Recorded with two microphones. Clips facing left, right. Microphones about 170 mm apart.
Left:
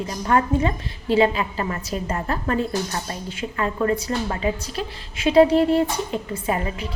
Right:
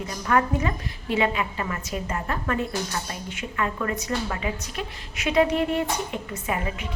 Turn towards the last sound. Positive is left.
turn(degrees=30)  # may be behind; listen again after turning